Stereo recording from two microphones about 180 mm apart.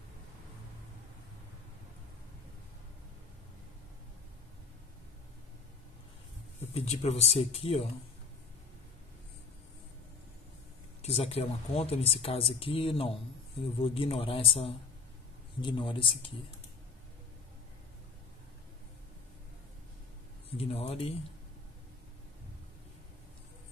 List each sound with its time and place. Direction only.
6.7 s speech: 35° left (ahead or behind)
11.0 s speech: 35° left (ahead or behind)
20.5 s speech: 35° left (ahead or behind)